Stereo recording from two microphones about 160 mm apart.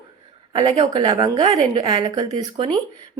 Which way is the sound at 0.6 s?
30° right (ahead or behind).